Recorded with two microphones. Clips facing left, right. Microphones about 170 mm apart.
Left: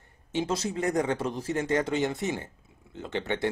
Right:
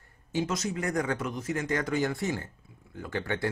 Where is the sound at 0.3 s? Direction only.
25° left (ahead or behind).